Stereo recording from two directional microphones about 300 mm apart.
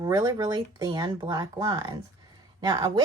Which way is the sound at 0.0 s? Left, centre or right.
Centre.